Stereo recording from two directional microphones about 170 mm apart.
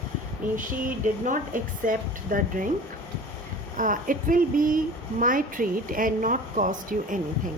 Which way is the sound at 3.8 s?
55° right (ahead or behind).